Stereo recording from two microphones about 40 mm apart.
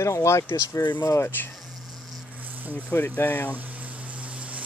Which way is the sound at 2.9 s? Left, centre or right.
Left.